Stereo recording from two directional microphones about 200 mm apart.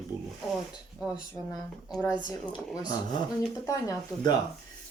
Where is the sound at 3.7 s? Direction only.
20° left (ahead or behind).